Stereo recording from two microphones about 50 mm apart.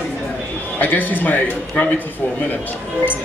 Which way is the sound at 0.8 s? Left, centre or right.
Left.